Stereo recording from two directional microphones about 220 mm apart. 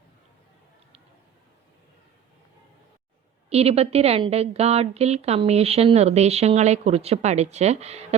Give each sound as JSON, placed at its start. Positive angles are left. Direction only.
{"t": 3.5, "sound": "a woman's voice", "side_deg": -25}